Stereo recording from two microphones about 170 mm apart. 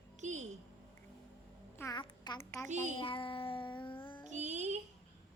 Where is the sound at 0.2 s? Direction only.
45° right (ahead or behind).